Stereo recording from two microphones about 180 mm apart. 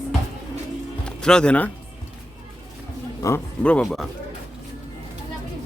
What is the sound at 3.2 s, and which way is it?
Speech, 10° left (ahead or behind).